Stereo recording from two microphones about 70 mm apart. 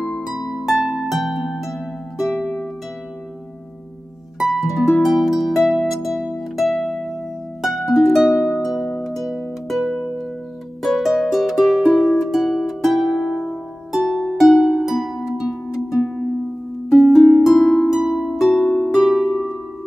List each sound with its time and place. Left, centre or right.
0.2 s harp: centre
2.3 s harp: left
4.4 s harp: centre
9.0 s music: centre
13.9 s harp: centre
14.4 s harp: centre
16.9 s harp: centre